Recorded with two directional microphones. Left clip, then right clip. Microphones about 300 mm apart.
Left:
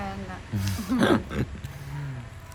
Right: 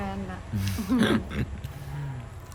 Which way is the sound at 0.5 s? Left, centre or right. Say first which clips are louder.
Right 1 dB; centre.